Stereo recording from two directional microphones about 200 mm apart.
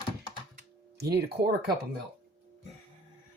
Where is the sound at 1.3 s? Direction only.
50° right (ahead or behind).